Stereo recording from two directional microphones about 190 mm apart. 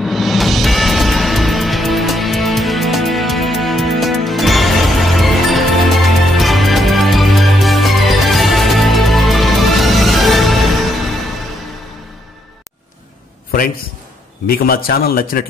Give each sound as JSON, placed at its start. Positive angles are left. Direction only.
{"t": 0.0, "sound": "music", "side_deg": 0}
{"t": 14.5, "sound": "a man's voice", "side_deg": 50}